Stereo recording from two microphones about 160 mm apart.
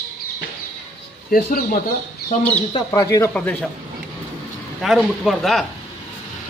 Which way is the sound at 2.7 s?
25° left (ahead or behind).